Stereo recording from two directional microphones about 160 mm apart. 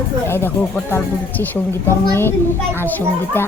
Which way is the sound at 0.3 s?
15° left (ahead or behind).